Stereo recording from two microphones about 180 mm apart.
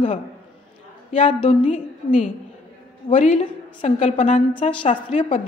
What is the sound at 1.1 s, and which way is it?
A woman's voice, 40° left (ahead or behind).